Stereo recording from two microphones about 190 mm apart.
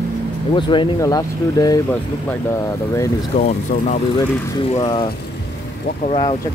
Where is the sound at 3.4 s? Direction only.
45° left (ahead or behind).